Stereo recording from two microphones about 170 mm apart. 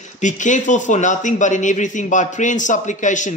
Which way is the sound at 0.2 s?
45° left (ahead or behind).